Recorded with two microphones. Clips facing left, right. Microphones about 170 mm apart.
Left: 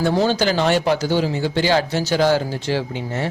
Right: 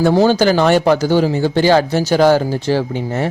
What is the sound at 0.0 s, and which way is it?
Speech, 40° right (ahead or behind).